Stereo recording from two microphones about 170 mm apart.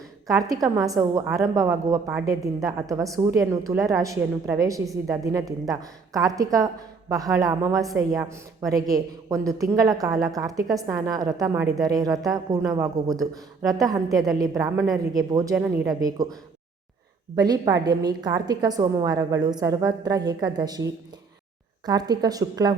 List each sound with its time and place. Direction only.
0.3 s a woman's voice: 20° right (ahead or behind)
3.3 s a woman's voice: 20° right (ahead or behind)
13.1 s speech: centre (ahead or behind)
13.7 s a woman's voice: 20° right (ahead or behind)
15.5 s speech: 5° right (ahead or behind)
16.0 s a woman's voice: 20° right (ahead or behind)
17.3 s a woman's voice: 25° right (ahead or behind)